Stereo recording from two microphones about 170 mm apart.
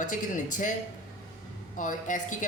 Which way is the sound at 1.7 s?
50° left (ahead or behind).